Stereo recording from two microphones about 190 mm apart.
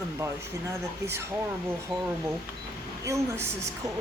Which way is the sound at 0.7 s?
15° right (ahead or behind).